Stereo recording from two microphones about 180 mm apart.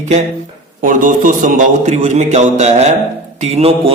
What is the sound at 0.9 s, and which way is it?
A man's voice, 45° right (ahead or behind).